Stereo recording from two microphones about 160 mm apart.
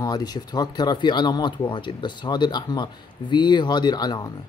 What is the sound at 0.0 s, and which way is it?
Speech, 25° left (ahead or behind).